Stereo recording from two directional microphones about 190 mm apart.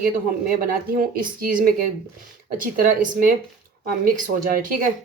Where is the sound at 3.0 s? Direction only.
45° right (ahead or behind).